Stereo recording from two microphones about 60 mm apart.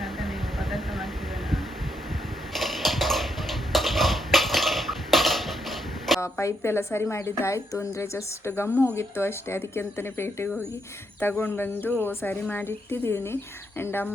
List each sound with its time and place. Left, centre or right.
0.0 s vehicle: centre
2.5 s a sound: centre
6.4 s a woman's voice: left
12.6 s a woman's voice: left